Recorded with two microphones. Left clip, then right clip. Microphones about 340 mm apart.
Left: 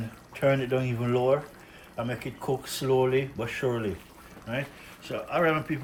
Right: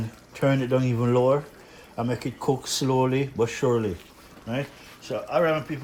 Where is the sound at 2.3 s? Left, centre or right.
Right.